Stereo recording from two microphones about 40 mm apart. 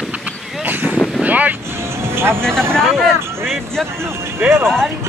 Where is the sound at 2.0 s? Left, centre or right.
Right.